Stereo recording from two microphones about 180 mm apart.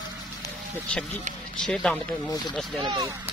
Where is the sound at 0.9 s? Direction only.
5° left (ahead or behind).